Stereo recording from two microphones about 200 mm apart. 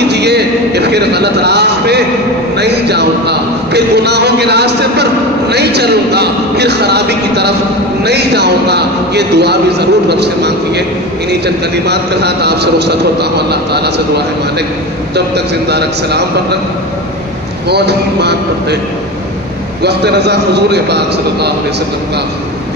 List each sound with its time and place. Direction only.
0.1 s a man's voice: 55° right (ahead or behind)
17.6 s a man's voice: 55° right (ahead or behind)
19.8 s a man's voice: 55° right (ahead or behind)